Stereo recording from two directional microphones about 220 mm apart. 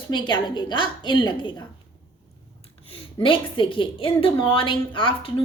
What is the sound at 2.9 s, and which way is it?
A woman's voice, 25° left (ahead or behind).